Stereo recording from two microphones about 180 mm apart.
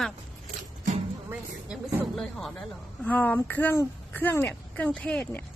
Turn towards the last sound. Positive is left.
turn(degrees=10)  # may be behind; listen again after turning